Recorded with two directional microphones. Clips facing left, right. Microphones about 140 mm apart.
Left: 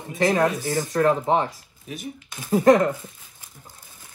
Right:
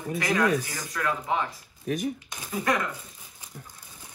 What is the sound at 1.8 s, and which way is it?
Speech, 45° right (ahead or behind).